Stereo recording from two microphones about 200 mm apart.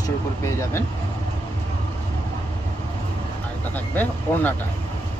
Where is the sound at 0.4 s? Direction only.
15° left (ahead or behind).